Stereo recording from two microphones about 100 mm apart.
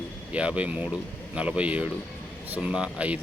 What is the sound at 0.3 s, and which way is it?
Speech, 15° right (ahead or behind).